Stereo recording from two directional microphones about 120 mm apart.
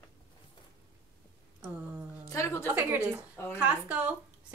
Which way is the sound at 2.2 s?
25° left (ahead or behind).